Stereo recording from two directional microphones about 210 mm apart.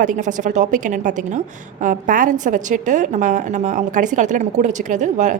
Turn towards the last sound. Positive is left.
turn(degrees=-35)  # may be behind; listen again after turning